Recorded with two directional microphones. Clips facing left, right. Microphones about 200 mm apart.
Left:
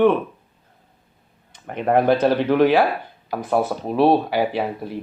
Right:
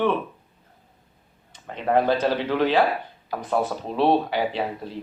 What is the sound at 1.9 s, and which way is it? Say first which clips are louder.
Speech: left 4 dB; 20° left (ahead or behind).